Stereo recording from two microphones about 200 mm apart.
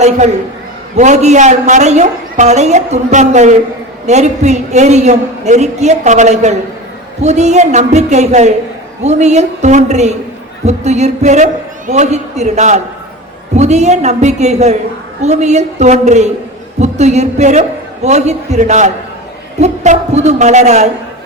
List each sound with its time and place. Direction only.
0.9 s a woman's voice: 35° right (ahead or behind)